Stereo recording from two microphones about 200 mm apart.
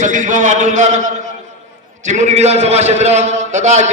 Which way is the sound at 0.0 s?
40° right (ahead or behind).